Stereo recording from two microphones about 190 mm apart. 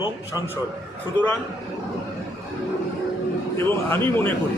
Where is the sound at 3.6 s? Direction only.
10° left (ahead or behind).